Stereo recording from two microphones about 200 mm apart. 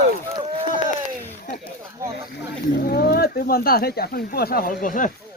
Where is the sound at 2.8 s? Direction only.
50° left (ahead or behind).